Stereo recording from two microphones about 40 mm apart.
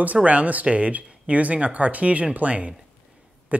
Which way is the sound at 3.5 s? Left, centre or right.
Right.